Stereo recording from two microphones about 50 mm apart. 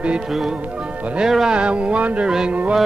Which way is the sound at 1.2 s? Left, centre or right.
Centre.